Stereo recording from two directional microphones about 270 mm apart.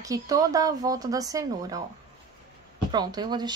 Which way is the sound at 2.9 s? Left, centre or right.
Centre.